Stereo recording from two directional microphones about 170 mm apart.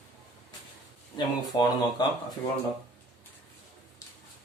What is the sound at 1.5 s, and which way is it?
Speech, 25° left (ahead or behind).